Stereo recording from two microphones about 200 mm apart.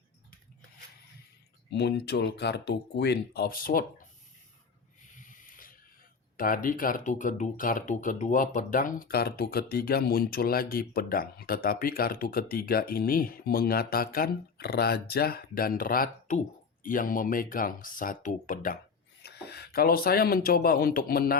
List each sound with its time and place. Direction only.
1.7 s speech: 55° left (ahead or behind)
5.1 s a sound: 40° left (ahead or behind)
6.3 s speech: 40° left (ahead or behind)
19.2 s speech: 55° left (ahead or behind)